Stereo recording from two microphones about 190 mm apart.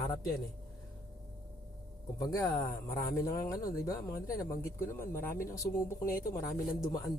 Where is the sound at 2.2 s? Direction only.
15° left (ahead or behind).